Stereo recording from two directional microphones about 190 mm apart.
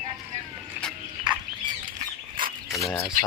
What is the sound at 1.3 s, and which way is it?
Bird, 25° right (ahead or behind).